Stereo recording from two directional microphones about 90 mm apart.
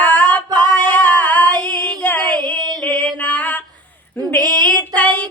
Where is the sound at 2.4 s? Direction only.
15° left (ahead or behind).